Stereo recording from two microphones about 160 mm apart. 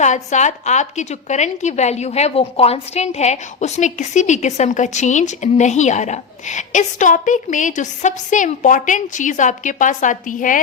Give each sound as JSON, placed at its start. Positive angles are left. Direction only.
{"t": 0.0, "sound": "a woman's voice", "side_deg": 45}